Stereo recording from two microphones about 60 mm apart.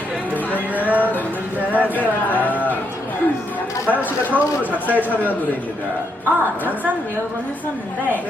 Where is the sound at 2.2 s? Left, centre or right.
Left.